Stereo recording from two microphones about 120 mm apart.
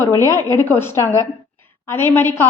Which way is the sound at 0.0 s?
25° left (ahead or behind).